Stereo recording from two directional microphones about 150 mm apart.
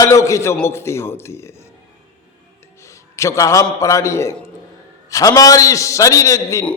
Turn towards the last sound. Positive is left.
turn(degrees=20)  # may be behind; listen again after turning